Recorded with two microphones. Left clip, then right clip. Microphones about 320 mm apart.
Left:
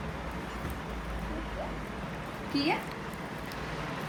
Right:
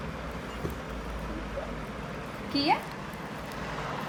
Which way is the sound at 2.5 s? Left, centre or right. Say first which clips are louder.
Right 2 dB; centre.